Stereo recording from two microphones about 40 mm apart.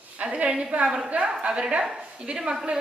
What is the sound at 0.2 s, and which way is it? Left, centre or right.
Speech, right.